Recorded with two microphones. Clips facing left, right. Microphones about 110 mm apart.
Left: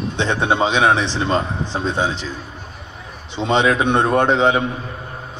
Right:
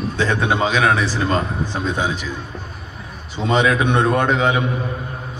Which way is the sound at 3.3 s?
25° left (ahead or behind).